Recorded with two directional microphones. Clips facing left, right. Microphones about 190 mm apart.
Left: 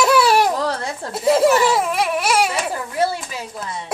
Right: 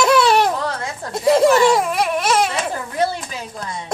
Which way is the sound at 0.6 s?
35° left (ahead or behind).